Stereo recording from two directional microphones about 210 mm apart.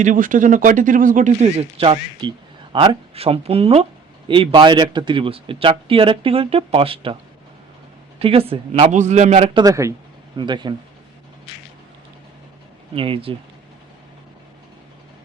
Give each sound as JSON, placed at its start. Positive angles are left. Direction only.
{"t": 0.0, "sound": "speech", "side_deg": -40}
{"t": 8.2, "sound": "speech", "side_deg": -25}
{"t": 12.9, "sound": "speech", "side_deg": -25}